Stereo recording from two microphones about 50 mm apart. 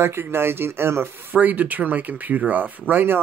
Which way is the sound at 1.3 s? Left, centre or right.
Right.